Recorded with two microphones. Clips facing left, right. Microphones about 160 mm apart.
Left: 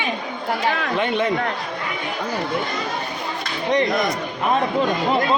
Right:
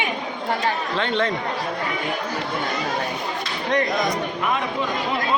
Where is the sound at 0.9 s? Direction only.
10° left (ahead or behind).